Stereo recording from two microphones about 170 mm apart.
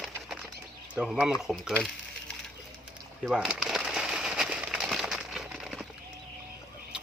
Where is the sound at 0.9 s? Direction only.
5° right (ahead or behind).